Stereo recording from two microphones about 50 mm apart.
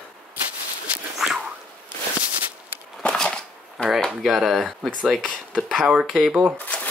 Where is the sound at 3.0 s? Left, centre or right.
Centre.